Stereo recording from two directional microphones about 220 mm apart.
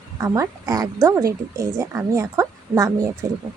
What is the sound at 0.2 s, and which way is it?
Speech, 15° right (ahead or behind).